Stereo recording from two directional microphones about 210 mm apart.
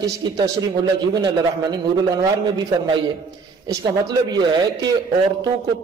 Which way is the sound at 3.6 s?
20° right (ahead or behind).